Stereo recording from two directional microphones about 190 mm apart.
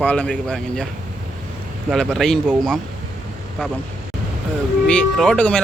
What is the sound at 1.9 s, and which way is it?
Speech, centre (ahead or behind).